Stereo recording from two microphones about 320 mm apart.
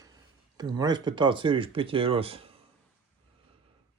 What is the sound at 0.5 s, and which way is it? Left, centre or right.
Speech, centre.